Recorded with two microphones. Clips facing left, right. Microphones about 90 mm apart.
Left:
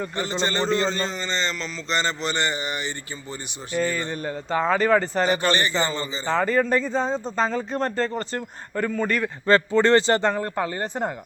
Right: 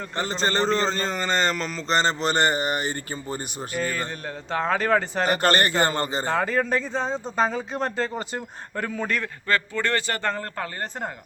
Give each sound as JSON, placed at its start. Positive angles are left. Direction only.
{"t": 0.4, "sound": "a man's voice", "side_deg": -40}
{"t": 3.7, "sound": "speech", "side_deg": 0}
{"t": 5.3, "sound": "a man's voice", "side_deg": -50}
{"t": 6.2, "sound": "speech", "side_deg": -5}
{"t": 9.5, "sound": "a man's voice", "side_deg": 30}